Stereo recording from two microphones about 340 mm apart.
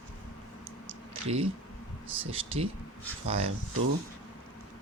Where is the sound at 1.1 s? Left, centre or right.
Centre.